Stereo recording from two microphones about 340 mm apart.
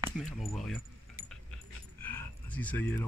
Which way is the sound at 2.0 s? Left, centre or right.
Centre.